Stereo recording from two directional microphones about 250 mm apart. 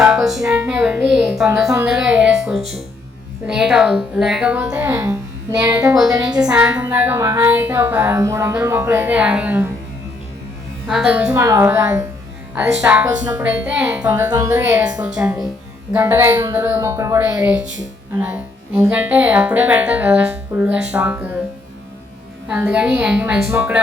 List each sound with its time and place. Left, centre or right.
0.0 s music: centre
1.7 s a woman's voice: centre
10.8 s a woman's voice: centre
22.4 s a woman's voice: centre